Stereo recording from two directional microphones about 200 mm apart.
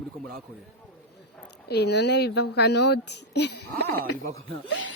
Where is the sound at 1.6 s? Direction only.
55° left (ahead or behind); by 4.2 s 75° left (ahead or behind).